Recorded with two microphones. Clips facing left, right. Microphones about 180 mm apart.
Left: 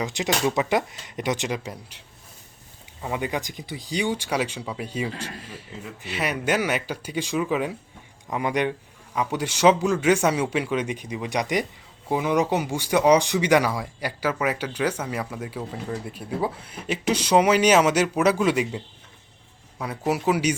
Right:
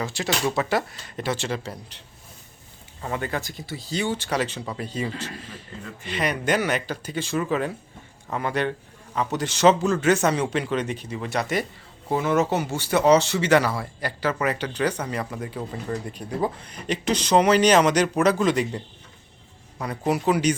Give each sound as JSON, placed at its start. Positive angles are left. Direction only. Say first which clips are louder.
{"t": 0.0, "sound": "speech", "louder": "left 1 dB", "side_deg": 15}
{"t": 19.8, "sound": "speech", "louder": "right 1 dB", "side_deg": 5}